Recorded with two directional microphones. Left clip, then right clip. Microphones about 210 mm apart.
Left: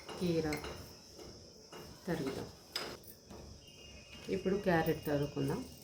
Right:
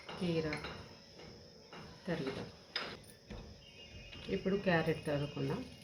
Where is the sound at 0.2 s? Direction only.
20° left (ahead or behind).